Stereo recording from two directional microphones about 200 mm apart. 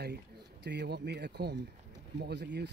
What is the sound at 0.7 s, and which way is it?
Speech, 55° right (ahead or behind).